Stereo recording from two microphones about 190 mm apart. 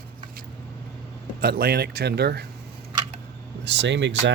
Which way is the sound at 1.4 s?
55° right (ahead or behind).